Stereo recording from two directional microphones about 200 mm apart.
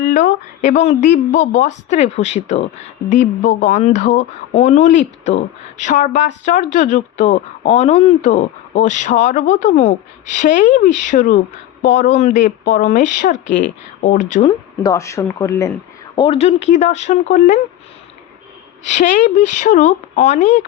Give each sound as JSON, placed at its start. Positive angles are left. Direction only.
{"t": 0.0, "sound": "speech", "side_deg": 40}
{"t": 13.3, "sound": "a woman's voice", "side_deg": 65}
{"t": 14.0, "sound": "speech", "side_deg": 40}
{"t": 14.4, "sound": "speech", "side_deg": 15}
{"t": 18.9, "sound": "speech", "side_deg": 40}